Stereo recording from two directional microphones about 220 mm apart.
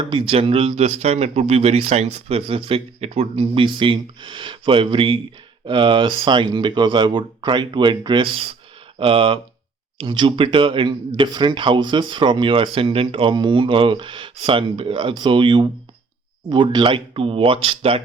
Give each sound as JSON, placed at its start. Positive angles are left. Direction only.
{"t": 0.1, "sound": "speech", "side_deg": -25}